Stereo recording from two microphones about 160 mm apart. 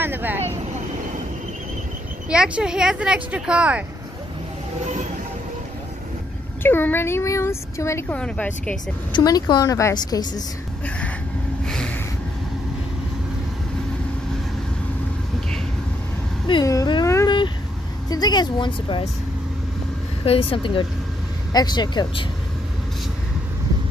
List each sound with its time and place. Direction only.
0.0 s speech: 10° right (ahead or behind)
2.2 s speech: 5° right (ahead or behind)
6.6 s speech: 15° left (ahead or behind)
9.1 s a woman's voice: 25° left (ahead or behind)
11.6 s snort: 5° left (ahead or behind)
16.4 s a woman's voice: 25° left (ahead or behind)
20.2 s a woman's voice: 35° left (ahead or behind)